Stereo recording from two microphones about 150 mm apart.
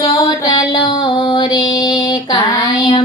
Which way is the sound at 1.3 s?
30° left (ahead or behind).